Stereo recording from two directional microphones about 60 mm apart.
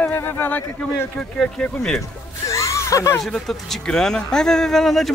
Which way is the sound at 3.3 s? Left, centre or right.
Centre.